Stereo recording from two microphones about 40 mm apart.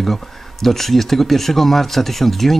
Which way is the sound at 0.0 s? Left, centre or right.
Centre.